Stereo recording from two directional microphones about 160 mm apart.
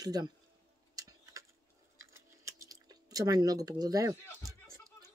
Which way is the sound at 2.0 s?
20° right (ahead or behind).